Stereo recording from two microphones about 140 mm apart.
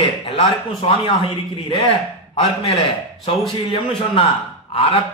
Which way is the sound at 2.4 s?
45° left (ahead or behind).